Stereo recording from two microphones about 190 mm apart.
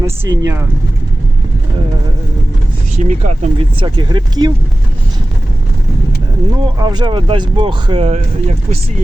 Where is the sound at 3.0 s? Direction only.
40° right (ahead or behind); by 4.5 s 25° right (ahead or behind).